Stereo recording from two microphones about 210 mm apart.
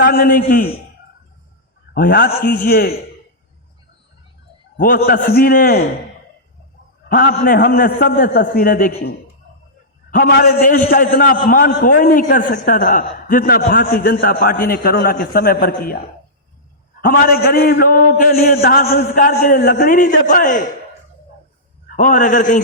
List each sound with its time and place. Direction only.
0.0 s a man's voice: 45° left (ahead or behind)
1.9 s a man's voice: 45° left (ahead or behind)
4.8 s a man's voice: 45° left (ahead or behind)
7.1 s a man's voice: 40° left (ahead or behind)
10.1 s a man's voice: 45° left (ahead or behind)
17.0 s a man's voice: 45° left (ahead or behind)
21.8 s a man's voice: 40° left (ahead or behind)